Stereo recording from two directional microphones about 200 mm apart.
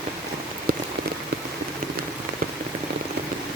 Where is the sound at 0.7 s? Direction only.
50° right (ahead or behind).